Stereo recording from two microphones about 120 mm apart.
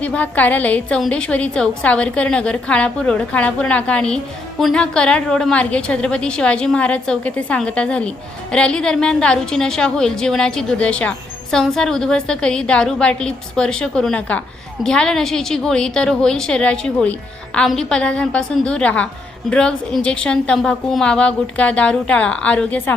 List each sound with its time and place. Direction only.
0.0 s a woman's voice: 10° left (ahead or behind)